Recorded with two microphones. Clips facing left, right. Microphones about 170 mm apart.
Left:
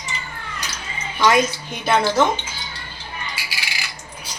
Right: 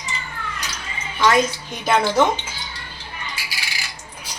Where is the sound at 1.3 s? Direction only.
5° left (ahead or behind).